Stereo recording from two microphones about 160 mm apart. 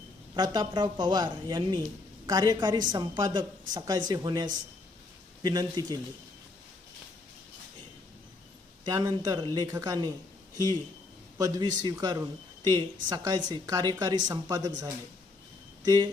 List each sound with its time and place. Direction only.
0.3 s a woman's voice: 25° right (ahead or behind)
8.8 s a woman's voice: 25° right (ahead or behind)
11.3 s a woman's voice: 20° right (ahead or behind)
15.8 s speech: 25° right (ahead or behind)